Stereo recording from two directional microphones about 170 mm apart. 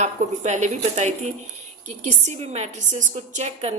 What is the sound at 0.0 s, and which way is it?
A woman's voice, 45° right (ahead or behind).